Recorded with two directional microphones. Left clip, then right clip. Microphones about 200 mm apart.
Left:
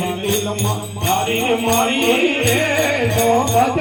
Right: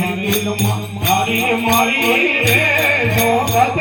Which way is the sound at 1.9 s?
20° left (ahead or behind).